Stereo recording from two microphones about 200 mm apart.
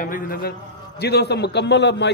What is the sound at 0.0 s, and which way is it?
A man's voice, 40° left (ahead or behind).